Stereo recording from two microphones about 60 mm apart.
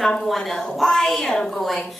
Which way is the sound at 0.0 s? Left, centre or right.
Centre.